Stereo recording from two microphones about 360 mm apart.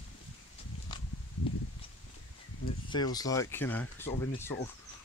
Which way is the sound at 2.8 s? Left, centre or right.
Centre.